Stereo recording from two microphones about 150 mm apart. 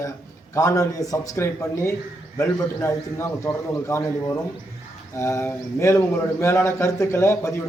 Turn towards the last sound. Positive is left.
turn(degrees=15)  # may be behind; listen again after turning